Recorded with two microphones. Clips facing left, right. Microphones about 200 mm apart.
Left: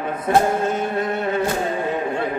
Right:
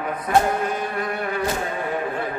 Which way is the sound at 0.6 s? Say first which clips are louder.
Left 4 dB; 25° left (ahead or behind).